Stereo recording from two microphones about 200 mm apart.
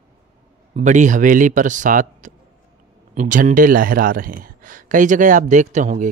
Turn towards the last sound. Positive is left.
turn(degrees=-35)  # may be behind; listen again after turning